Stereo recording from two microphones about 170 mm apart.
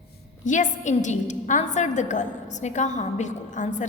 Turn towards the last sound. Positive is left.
turn(degrees=45)  # may be behind; listen again after turning